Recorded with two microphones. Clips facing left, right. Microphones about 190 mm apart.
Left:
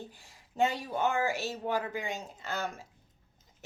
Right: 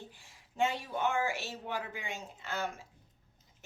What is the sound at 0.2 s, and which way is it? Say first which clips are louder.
A woman's voice: left 3 dB; 40° left (ahead or behind).